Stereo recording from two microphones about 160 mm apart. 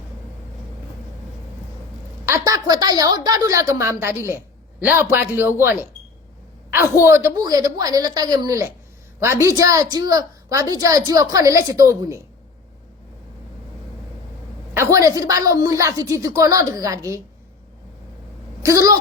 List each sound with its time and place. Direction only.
2.2 s a woman's voice: 20° right (ahead or behind)
7.0 s a woman's voice: 20° right (ahead or behind)
14.7 s a woman's voice: 15° right (ahead or behind)
18.6 s a woman's voice: 20° right (ahead or behind)